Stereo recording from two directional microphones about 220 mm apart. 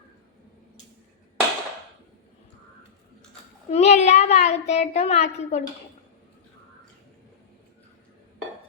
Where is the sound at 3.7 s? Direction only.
30° left (ahead or behind).